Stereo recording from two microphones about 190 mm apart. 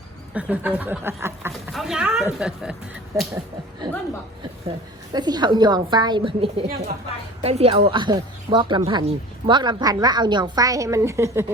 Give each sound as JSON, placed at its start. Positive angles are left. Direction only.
{"t": 0.3, "sound": "speech", "side_deg": -10}
{"t": 1.7, "sound": "speech", "side_deg": 0}
{"t": 5.1, "sound": "speech", "side_deg": -20}